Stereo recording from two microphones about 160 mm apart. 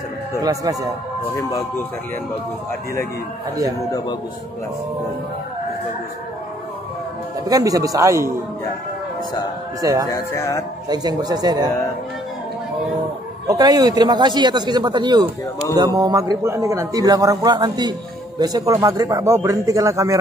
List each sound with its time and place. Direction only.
0.4 s a man's voice: 20° right (ahead or behind)
1.3 s speech: 15° left (ahead or behind)
7.4 s a man's voice: 20° right (ahead or behind)
9.8 s a man's voice: 20° right (ahead or behind)
10.0 s speech: 20° left (ahead or behind)
10.9 s a man's voice: 25° right (ahead or behind)
13.5 s a man's voice: 25° right (ahead or behind)